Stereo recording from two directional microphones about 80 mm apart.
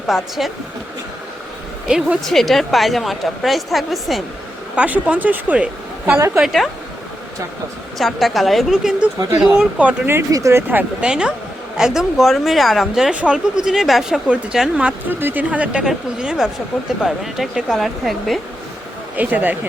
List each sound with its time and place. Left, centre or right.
0.1 s a woman's voice: centre
1.9 s a woman's voice: centre
2.2 s a woman's voice: centre
4.8 s a woman's voice: centre
6.1 s a woman's voice: right
6.4 s a woman's voice: centre
7.9 s a woman's voice: centre
10.5 s speech: right
11.0 s a woman's voice: centre
15.2 s a woman's voice: right; by 18.3 s centre
19.1 s speech: right